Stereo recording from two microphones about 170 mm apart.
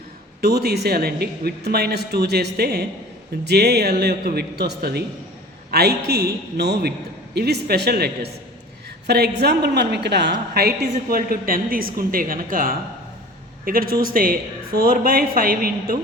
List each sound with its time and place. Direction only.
0.4 s a woman's voice: 70° right (ahead or behind)
14.1 s a woman's voice: 55° right (ahead or behind)